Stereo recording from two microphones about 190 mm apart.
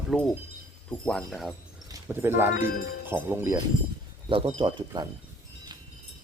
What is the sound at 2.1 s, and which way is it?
Speech, 10° right (ahead or behind).